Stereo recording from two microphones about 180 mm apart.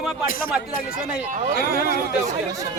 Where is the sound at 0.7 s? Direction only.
55° left (ahead or behind).